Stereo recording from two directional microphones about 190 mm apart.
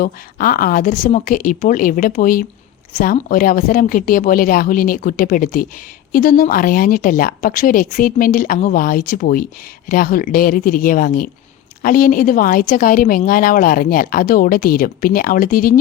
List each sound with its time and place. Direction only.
0.0 s a woman's voice: 50° left (ahead or behind)